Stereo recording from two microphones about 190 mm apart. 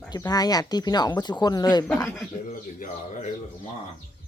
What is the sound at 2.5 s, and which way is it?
Speech, 45° left (ahead or behind).